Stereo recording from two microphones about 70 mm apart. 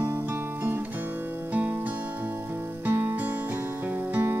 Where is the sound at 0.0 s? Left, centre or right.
Right.